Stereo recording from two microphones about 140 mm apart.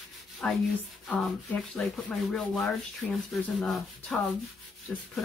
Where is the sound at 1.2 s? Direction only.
5° left (ahead or behind).